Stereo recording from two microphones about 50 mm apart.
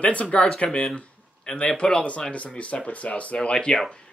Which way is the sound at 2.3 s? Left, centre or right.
Left.